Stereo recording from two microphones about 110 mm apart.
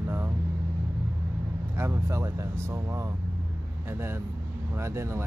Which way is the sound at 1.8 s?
25° right (ahead or behind).